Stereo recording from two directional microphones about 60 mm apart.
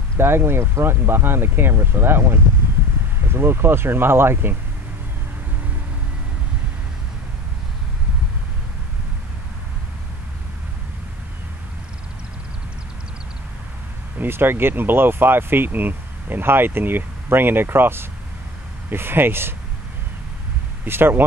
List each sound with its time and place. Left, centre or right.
0.2 s speech: right
14.1 s speech: right
20.8 s speech: right